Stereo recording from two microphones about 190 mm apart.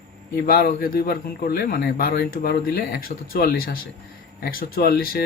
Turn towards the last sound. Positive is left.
turn(degrees=55)  # may be behind; listen again after turning